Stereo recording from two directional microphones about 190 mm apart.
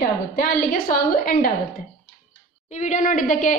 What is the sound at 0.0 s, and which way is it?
A woman's voice, 45° left (ahead or behind).